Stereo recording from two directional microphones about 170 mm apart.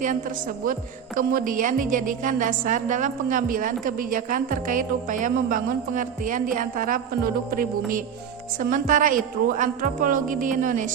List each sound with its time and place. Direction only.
0.0 s a woman's voice: 50° right (ahead or behind)